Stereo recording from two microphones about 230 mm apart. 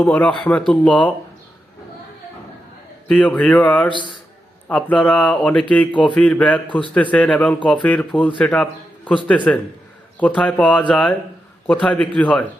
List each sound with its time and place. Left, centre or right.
0.0 s speech: centre
3.1 s a man's voice: centre
10.2 s speech: centre